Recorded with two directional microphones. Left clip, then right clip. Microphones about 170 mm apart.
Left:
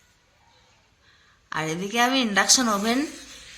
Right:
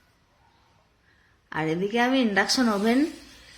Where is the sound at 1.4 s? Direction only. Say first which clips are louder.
Right 1 dB; 25° right (ahead or behind).